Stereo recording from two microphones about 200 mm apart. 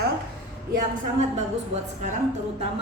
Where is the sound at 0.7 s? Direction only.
40° right (ahead or behind).